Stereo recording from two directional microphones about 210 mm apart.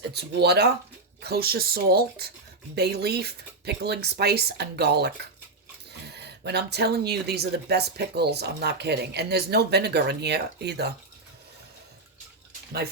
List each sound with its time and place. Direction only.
0.1 s speech: 50° right (ahead or behind)
6.1 s speech: 50° right (ahead or behind)